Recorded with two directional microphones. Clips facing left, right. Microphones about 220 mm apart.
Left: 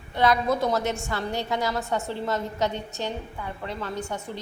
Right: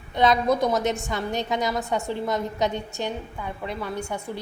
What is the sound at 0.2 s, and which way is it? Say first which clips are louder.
A woman's voice: right 2 dB; 20° right (ahead or behind).